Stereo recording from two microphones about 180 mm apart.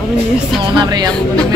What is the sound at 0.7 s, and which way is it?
Speech, 25° right (ahead or behind).